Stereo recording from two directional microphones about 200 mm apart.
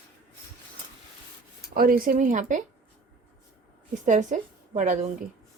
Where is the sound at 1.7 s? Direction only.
45° right (ahead or behind).